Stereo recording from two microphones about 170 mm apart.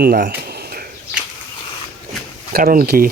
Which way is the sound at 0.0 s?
65° right (ahead or behind).